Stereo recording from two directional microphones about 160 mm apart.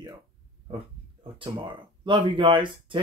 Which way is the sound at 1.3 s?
30° right (ahead or behind).